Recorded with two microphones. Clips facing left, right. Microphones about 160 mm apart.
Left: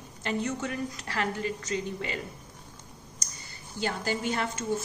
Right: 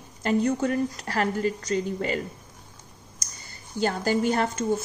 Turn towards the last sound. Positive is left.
turn(degrees=-40)  # may be behind; listen again after turning